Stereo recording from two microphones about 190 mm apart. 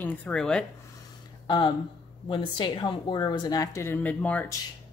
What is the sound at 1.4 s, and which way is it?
Speech, 25° left (ahead or behind).